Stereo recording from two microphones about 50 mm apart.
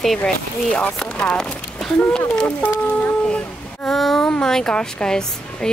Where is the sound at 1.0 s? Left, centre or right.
Centre.